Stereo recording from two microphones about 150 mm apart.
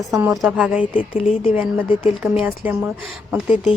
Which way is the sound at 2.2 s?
5° right (ahead or behind).